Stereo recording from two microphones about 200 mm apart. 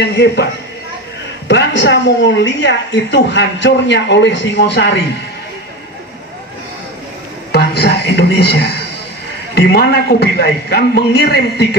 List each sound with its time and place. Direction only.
0.0 s a woman's voice: 55° left (ahead or behind)
1.5 s a woman's voice: 65° left (ahead or behind)
7.5 s music: 55° left (ahead or behind)
9.6 s a man's voice: 50° left (ahead or behind)